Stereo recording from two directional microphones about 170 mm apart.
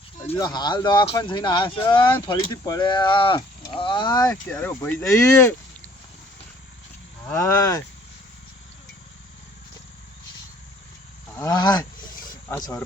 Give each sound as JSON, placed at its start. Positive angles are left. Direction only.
{"t": 0.3, "sound": "speech", "side_deg": 20}
{"t": 4.4, "sound": "speech", "side_deg": 10}
{"t": 7.3, "sound": "speech", "side_deg": 15}
{"t": 11.3, "sound": "speech", "side_deg": 20}
{"t": 12.3, "sound": "a sound", "side_deg": 20}